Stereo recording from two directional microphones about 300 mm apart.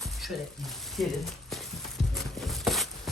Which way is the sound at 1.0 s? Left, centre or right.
Centre.